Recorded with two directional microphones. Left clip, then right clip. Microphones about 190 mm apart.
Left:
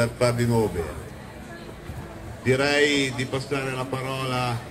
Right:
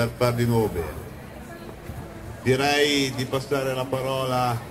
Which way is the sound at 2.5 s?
45° right (ahead or behind).